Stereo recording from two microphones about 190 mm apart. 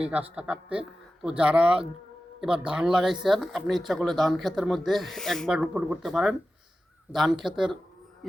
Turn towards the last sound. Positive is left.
turn(degrees=0)  # may be behind; listen again after turning